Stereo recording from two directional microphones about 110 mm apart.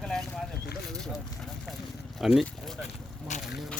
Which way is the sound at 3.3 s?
90° left.